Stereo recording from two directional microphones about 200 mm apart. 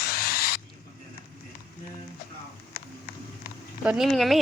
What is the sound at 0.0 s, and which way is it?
Owl, 50° left (ahead or behind).